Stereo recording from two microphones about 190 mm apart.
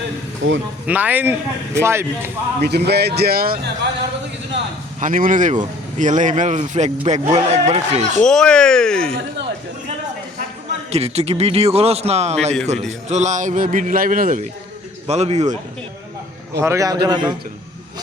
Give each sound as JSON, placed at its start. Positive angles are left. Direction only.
{"t": 0.4, "sound": "speech", "side_deg": -85}
{"t": 0.9, "sound": "speech", "side_deg": -10}
{"t": 2.6, "sound": "speech", "side_deg": -60}
{"t": 8.2, "sound": "speech", "side_deg": 5}
{"t": 10.9, "sound": "a man's voice", "side_deg": -35}
{"t": 16.6, "sound": "a man's voice", "side_deg": -15}